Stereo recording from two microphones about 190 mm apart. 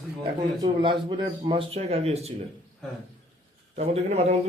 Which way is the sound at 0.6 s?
25° right (ahead or behind).